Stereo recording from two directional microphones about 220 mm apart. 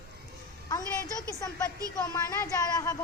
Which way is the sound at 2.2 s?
15° left (ahead or behind).